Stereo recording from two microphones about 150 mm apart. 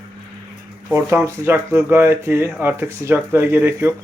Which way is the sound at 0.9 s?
20° right (ahead or behind).